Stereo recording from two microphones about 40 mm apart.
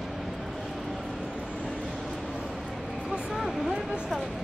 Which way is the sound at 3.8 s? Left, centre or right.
Centre.